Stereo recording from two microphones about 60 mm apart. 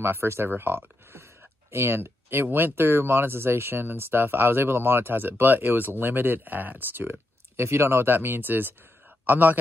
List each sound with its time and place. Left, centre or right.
0.0 s a man's voice: right